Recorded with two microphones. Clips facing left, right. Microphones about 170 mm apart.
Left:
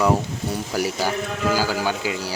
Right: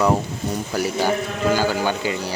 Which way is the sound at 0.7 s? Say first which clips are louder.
Right 3 dB; 5° left (ahead or behind).